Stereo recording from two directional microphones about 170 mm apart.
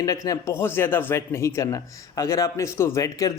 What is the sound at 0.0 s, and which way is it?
A man's voice, 20° left (ahead or behind).